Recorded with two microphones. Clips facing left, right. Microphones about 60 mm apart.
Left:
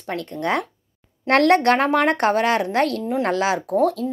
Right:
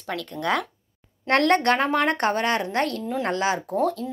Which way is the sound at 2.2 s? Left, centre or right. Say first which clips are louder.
Left 4 dB; left.